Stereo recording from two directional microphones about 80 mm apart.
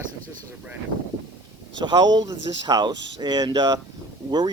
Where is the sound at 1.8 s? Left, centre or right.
Right.